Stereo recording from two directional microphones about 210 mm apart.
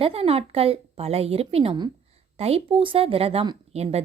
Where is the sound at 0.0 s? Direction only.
25° right (ahead or behind).